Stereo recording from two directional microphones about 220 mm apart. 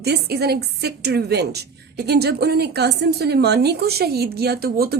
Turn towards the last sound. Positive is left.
turn(degrees=-45)  # may be behind; listen again after turning